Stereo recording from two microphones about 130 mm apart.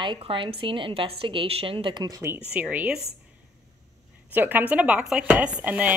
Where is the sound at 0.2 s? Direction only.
45° right (ahead or behind); by 2.3 s 30° right (ahead or behind).